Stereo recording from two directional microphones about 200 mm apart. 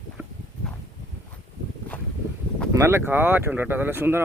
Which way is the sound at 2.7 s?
15° right (ahead or behind).